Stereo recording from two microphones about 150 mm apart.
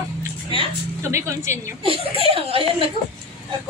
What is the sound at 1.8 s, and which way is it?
Speech, 40° right (ahead or behind).